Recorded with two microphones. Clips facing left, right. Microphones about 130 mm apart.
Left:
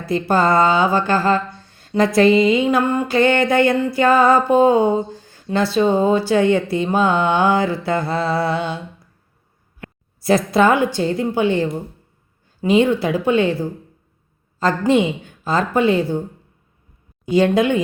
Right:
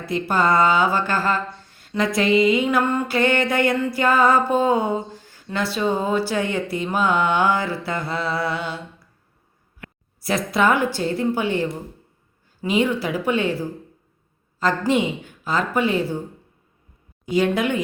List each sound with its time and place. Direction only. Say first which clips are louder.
0.0 s speech: left 4 dB; 30° left (ahead or behind)
9.8 s a sound: left 8 dB; 30° left (ahead or behind)
10.9 s a woman's voice: left 3 dB; 20° left (ahead or behind)
17.3 s speech: left 5 dB; 30° left (ahead or behind)